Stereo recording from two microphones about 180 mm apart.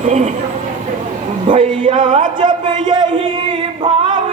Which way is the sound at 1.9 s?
25° right (ahead or behind).